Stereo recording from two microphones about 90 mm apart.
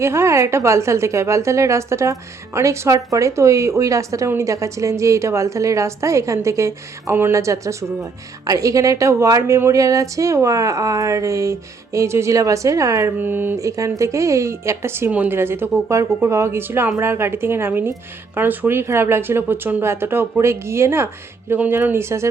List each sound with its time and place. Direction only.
0.0 s a woman's voice: 30° right (ahead or behind)
13.1 s speech: 20° right (ahead or behind)
13.6 s a woman's voice: 35° right (ahead or behind)